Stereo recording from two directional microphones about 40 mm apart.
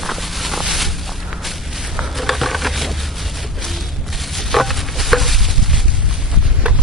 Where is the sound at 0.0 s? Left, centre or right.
Centre.